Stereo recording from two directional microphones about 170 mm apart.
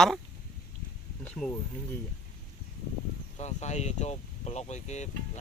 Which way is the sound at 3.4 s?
40° left (ahead or behind).